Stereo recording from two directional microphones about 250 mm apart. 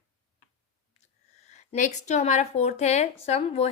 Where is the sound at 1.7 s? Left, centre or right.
Left.